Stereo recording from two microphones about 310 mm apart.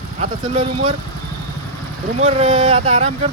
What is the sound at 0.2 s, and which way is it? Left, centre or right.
Speech, right.